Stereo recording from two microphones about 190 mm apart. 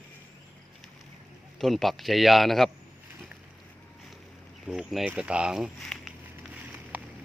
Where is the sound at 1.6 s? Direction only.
Centre (ahead or behind).